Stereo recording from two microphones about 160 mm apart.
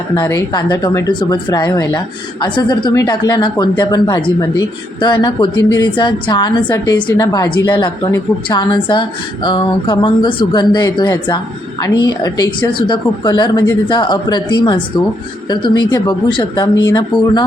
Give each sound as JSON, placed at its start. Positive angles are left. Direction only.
{"t": 0.2, "sound": "a woman's voice", "side_deg": 25}